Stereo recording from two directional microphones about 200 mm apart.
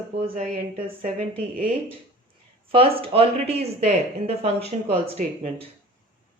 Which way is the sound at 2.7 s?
30° right (ahead or behind).